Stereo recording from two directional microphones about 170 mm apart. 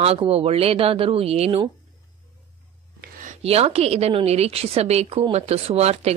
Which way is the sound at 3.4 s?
35° right (ahead or behind).